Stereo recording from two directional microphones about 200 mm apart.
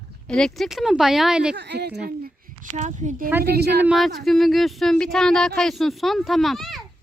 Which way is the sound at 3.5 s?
55° right (ahead or behind).